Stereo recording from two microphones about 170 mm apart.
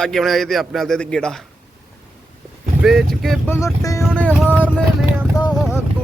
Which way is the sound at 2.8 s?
Centre (ahead or behind).